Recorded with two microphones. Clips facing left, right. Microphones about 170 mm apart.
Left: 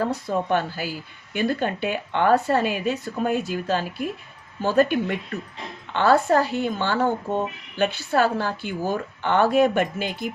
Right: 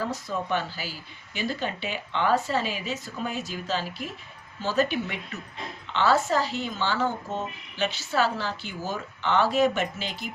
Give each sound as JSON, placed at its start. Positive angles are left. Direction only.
{"t": 0.0, "sound": "a woman's voice", "side_deg": 55}